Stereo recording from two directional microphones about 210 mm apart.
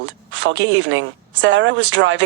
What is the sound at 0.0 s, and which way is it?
A woman's voice, 60° right (ahead or behind).